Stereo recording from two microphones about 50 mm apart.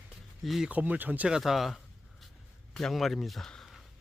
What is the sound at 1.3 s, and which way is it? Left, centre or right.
Speech, centre.